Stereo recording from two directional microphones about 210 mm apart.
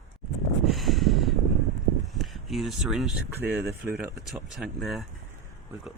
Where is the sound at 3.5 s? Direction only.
50° right (ahead or behind).